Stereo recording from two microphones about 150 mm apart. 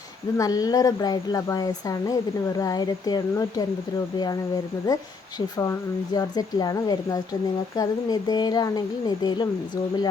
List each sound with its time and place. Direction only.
0.3 s speech: 25° left (ahead or behind)
6.1 s speech: 25° left (ahead or behind)